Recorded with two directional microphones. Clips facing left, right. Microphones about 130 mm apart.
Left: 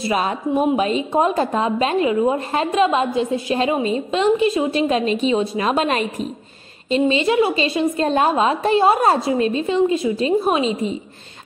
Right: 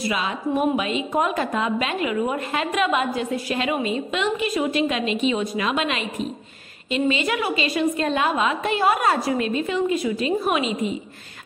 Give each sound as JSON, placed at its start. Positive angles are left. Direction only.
{"t": 0.1, "sound": "a woman's voice", "side_deg": 40}